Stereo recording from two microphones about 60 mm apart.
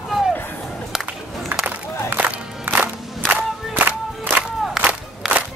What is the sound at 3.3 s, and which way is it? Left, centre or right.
Battle cry, right.